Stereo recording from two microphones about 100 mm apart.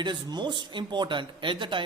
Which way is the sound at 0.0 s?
50° right (ahead or behind).